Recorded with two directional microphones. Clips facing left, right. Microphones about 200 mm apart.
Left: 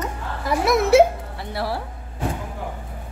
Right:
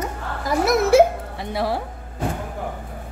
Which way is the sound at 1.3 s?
20° right (ahead or behind).